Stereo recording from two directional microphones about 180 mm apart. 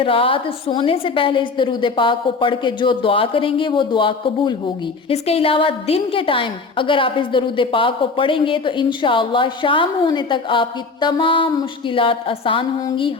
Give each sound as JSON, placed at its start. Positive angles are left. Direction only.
{"t": 0.0, "sound": "a woman's voice", "side_deg": 30}